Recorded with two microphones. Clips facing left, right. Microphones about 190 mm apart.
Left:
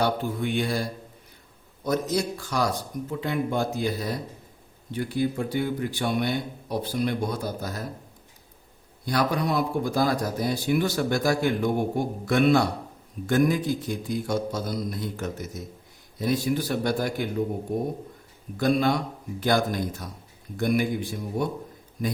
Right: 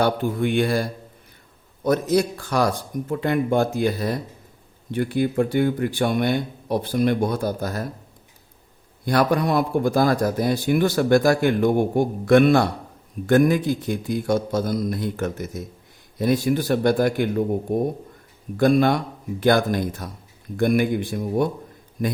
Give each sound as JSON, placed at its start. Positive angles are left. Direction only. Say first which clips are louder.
{"t": 0.0, "sound": "speech", "louder": "right 5 dB", "side_deg": -60}
{"t": 9.0, "sound": "speech", "louder": "right 5 dB", "side_deg": -55}